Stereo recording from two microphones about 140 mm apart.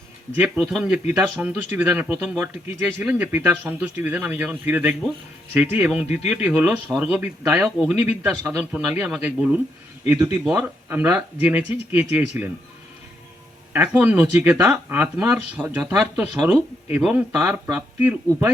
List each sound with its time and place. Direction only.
0.3 s speech: 10° right (ahead or behind)
13.7 s speech: 10° right (ahead or behind)